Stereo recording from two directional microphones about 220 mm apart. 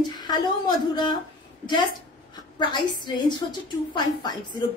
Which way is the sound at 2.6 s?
20° left (ahead or behind).